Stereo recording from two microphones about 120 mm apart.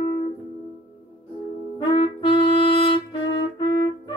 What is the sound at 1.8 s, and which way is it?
Music, 50° left (ahead or behind).